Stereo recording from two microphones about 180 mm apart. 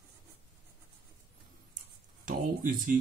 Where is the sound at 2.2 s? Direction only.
45° right (ahead or behind).